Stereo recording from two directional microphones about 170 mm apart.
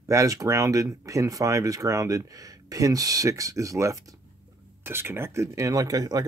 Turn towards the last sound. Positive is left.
turn(degrees=-20)  # may be behind; listen again after turning